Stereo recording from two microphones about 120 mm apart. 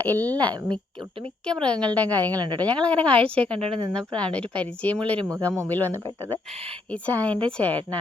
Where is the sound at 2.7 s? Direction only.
10° left (ahead or behind).